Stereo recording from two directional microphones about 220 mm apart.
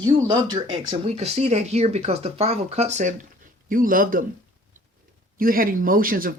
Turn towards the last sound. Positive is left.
turn(degrees=-40)  # may be behind; listen again after turning